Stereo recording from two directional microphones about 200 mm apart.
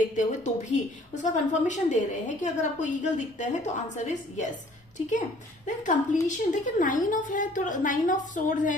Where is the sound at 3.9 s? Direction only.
35° left (ahead or behind).